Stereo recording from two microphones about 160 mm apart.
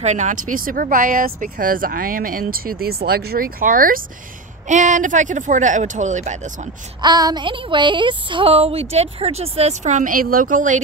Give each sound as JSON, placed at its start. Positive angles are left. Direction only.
{"t": 0.0, "sound": "speech", "side_deg": -45}
{"t": 4.6, "sound": "speech", "side_deg": -50}
{"t": 7.0, "sound": "speech", "side_deg": -25}